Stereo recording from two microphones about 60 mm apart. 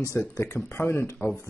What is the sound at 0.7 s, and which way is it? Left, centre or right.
Speech, left.